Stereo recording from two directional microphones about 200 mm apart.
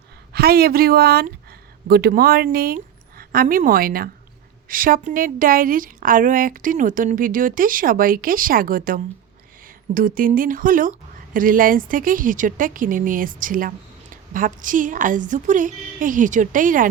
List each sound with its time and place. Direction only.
0.3 s a woman's voice: 50° right (ahead or behind)